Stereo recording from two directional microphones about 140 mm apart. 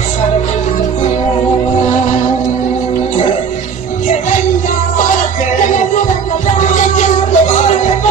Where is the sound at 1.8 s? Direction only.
60° left (ahead or behind).